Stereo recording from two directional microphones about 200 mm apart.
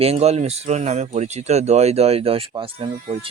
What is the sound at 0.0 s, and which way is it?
Speech, 30° right (ahead or behind).